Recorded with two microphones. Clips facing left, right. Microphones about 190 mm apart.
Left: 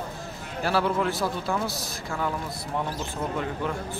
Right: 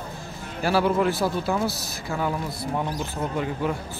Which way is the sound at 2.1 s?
15° right (ahead or behind).